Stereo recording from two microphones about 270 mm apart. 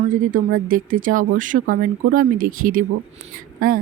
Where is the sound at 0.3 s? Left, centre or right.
Right.